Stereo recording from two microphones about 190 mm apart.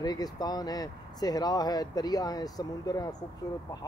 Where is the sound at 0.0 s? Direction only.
20° left (ahead or behind).